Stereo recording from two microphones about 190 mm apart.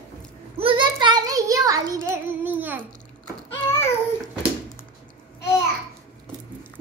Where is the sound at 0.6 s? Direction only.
25° right (ahead or behind).